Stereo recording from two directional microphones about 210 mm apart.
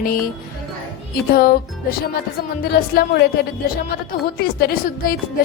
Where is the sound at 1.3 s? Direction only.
45° left (ahead or behind).